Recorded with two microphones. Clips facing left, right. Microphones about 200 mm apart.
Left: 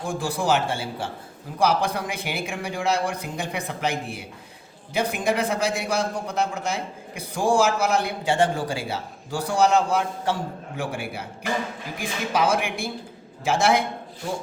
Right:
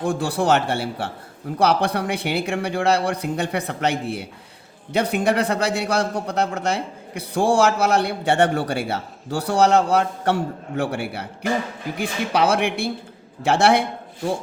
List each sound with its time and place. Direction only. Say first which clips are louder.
0.0 s a man's voice: right 5 dB; 65° right (ahead or behind)